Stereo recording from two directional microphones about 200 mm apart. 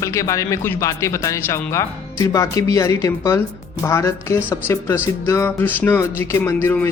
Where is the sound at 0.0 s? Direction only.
15° left (ahead or behind).